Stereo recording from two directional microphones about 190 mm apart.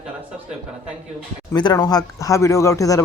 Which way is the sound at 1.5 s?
25° left (ahead or behind).